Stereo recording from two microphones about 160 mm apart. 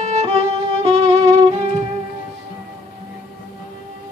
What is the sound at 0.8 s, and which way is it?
Violin, 45° right (ahead or behind).